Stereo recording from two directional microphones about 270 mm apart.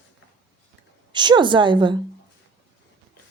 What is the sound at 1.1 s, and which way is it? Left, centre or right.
Speech, centre.